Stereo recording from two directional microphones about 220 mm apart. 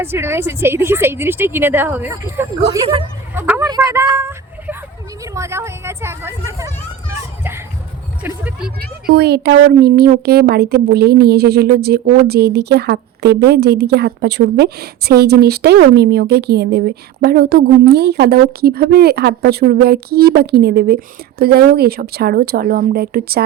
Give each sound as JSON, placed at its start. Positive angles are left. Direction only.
{"t": 0.0, "sound": "a woman's voice", "side_deg": -10}
{"t": 7.1, "sound": "children playing", "side_deg": -10}
{"t": 8.2, "sound": "a woman's voice", "side_deg": -5}
{"t": 9.0, "sound": "speech", "side_deg": -45}